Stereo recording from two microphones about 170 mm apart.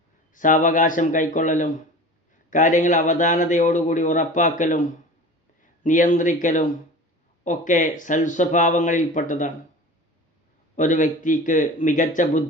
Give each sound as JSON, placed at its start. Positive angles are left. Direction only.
{"t": 0.3, "sound": "a man's voice", "side_deg": 50}
{"t": 10.8, "sound": "a man's voice", "side_deg": 50}